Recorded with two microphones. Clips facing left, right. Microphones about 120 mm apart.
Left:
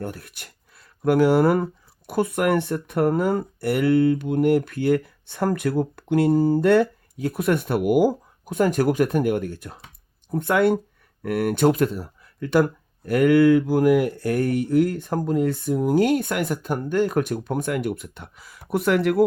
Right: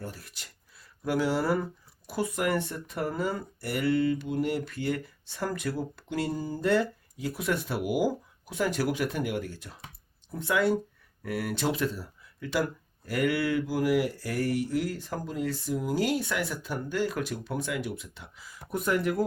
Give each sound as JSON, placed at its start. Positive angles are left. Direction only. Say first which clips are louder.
{"t": 0.0, "sound": "speech", "louder": "left 8 dB", "side_deg": 60}
{"t": 18.7, "sound": "speech", "louder": "left 7 dB", "side_deg": 75}